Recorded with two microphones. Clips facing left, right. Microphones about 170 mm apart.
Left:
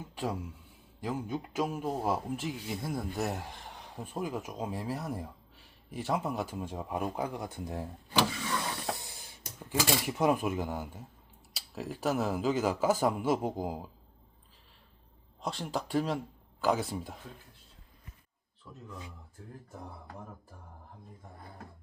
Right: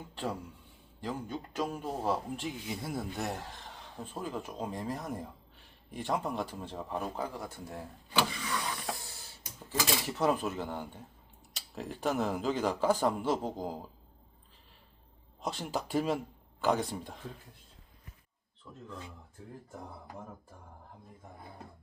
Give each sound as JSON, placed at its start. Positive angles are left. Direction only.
{"t": 0.1, "sound": "speech", "side_deg": 10}
{"t": 8.9, "sound": "a sound", "side_deg": 20}
{"t": 9.6, "sound": "speech", "side_deg": 10}
{"t": 15.4, "sound": "speech", "side_deg": 0}